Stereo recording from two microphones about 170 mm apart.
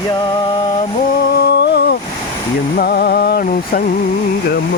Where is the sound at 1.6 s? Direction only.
80° left.